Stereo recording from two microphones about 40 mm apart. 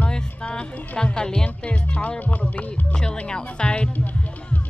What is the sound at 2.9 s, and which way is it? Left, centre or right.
Speech, left.